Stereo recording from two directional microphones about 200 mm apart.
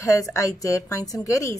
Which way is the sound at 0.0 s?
15° left (ahead or behind).